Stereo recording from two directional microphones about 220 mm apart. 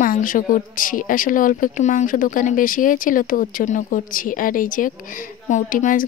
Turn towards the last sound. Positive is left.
turn(degrees=35)  # may be behind; listen again after turning